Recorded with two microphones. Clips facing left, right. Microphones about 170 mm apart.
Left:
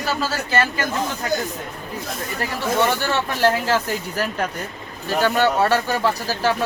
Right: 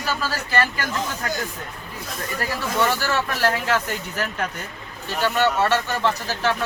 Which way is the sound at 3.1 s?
25° left (ahead or behind).